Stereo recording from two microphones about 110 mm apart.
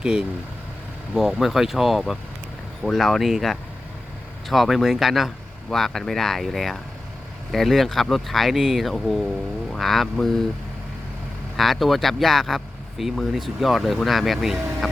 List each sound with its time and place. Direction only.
0.0 s speech: 10° right (ahead or behind)
11.5 s speech: centre (ahead or behind)